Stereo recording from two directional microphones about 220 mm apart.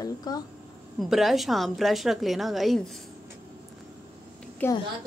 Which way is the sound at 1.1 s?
Centre (ahead or behind).